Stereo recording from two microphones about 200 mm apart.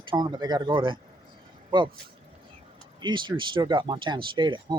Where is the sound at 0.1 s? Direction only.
20° right (ahead or behind).